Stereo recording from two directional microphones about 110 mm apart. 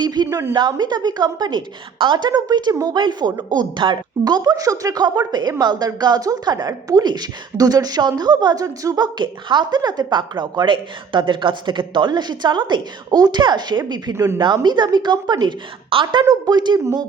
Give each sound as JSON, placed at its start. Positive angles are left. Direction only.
{"t": 0.0, "sound": "a sound", "side_deg": -40}
{"t": 0.3, "sound": "a woman's voice", "side_deg": -25}
{"t": 0.5, "sound": "a woman's voice", "side_deg": -40}
{"t": 14.3, "sound": "a woman's voice", "side_deg": -45}